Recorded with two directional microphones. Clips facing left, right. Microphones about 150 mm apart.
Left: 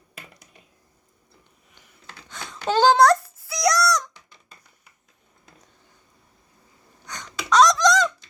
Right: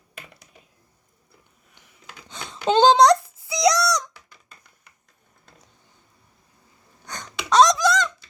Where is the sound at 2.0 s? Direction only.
15° right (ahead or behind).